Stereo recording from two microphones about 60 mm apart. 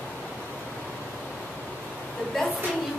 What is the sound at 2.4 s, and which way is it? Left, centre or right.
Speech, centre.